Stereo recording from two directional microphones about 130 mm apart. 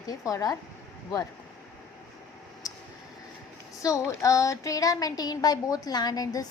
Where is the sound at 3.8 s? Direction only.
25° left (ahead or behind).